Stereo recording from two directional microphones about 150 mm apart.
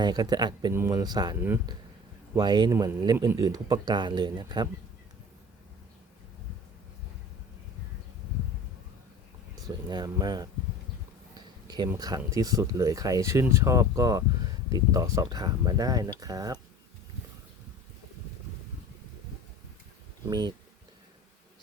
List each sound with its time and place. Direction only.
0.0 s speech: 25° right (ahead or behind)
0.7 s speech: 20° right (ahead or behind)
9.6 s speech: 25° right (ahead or behind)
11.3 s a sound: 30° right (ahead or behind)
11.9 s speech: 25° right (ahead or behind)